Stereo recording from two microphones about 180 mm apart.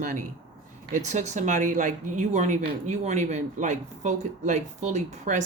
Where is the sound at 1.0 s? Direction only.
40° right (ahead or behind).